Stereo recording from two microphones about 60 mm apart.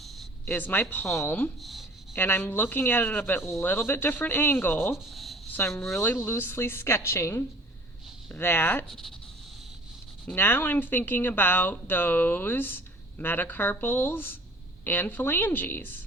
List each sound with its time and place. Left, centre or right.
0.0 s a sound: centre
0.4 s speech: left
1.6 s speech: centre
2.1 s speech: left
4.9 s a sound: centre
5.6 s speech: left
8.4 s speech: left
8.9 s speech: centre
10.3 s speech: left